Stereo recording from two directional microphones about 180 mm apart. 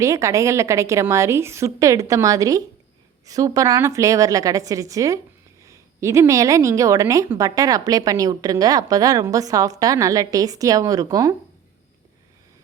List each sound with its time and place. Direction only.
0.0 s a woman's voice: 15° right (ahead or behind)